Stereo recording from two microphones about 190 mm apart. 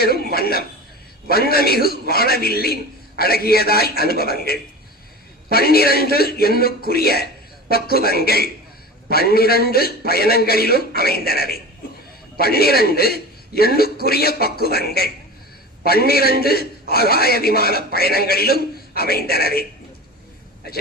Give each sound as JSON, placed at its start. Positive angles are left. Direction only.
{"t": 0.0, "sound": "a man's voice", "side_deg": 55}